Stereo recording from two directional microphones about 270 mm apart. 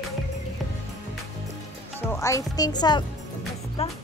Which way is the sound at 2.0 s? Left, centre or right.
Centre.